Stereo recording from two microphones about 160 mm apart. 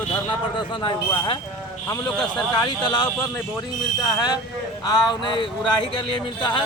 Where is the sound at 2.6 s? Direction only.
25° left (ahead or behind).